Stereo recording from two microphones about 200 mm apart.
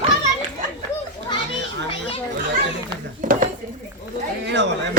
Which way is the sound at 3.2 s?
40° right (ahead or behind).